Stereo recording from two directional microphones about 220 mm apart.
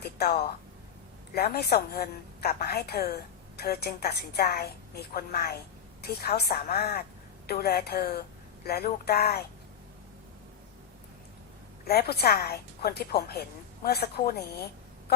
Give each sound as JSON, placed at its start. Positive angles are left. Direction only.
{"t": 0.0, "sound": "a sound", "side_deg": 45}
{"t": 1.3, "sound": "a woman's voice", "side_deg": 45}
{"t": 11.9, "sound": "a woman's voice", "side_deg": 45}